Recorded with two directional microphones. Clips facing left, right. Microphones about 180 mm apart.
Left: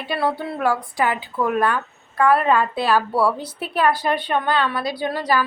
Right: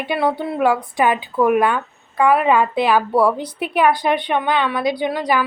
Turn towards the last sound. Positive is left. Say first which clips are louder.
# right 2 dB
turn(degrees=-15)  # may be behind; listen again after turning